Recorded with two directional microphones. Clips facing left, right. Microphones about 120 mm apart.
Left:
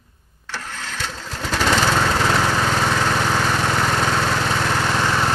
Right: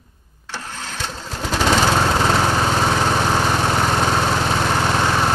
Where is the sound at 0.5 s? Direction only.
15° right (ahead or behind).